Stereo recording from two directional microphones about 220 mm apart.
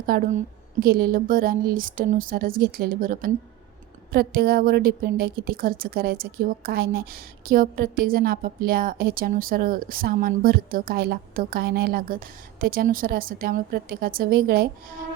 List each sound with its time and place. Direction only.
0.0 s a woman's voice: 40° right (ahead or behind)